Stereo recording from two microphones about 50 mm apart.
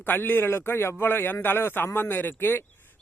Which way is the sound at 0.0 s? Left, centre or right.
Left.